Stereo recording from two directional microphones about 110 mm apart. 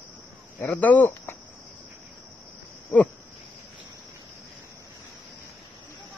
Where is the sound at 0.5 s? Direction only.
15° left (ahead or behind).